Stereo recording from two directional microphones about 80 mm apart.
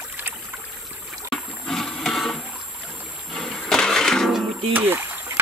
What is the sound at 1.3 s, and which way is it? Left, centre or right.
Toilet flush, centre.